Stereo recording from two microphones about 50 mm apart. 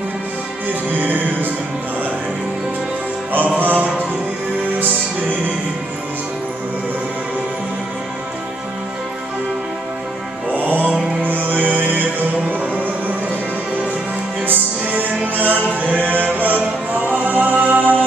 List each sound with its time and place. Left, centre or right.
0.9 s music: right
3.5 s music: right
10.5 s music: right
14.4 s music: right